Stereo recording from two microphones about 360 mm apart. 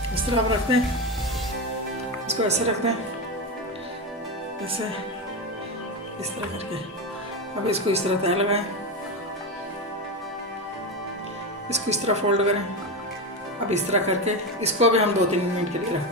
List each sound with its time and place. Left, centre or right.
0.1 s a woman's voice: centre
2.2 s a woman's voice: centre
7.7 s a woman's voice: centre
11.7 s a woman's voice: centre
13.7 s a woman's voice: centre